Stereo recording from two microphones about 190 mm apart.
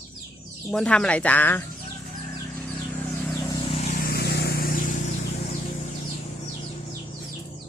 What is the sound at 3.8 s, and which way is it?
Vehicle, 45° left (ahead or behind).